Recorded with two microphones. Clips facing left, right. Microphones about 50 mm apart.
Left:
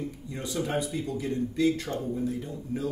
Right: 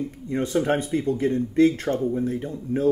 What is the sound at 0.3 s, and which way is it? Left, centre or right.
Speech, right.